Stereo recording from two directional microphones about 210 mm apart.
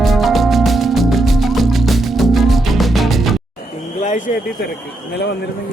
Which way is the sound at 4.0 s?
35° left (ahead or behind).